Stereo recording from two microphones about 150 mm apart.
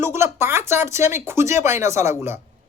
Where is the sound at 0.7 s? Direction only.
15° right (ahead or behind).